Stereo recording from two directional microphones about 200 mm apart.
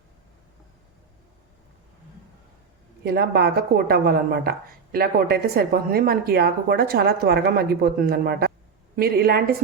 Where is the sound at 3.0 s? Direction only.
50° right (ahead or behind).